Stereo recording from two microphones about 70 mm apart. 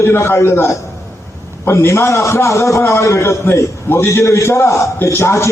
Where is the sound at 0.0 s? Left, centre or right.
Left.